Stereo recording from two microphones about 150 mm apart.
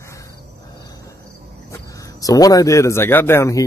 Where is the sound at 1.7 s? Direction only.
20° left (ahead or behind).